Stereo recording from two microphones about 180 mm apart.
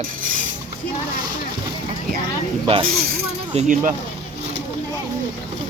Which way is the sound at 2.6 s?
30° right (ahead or behind).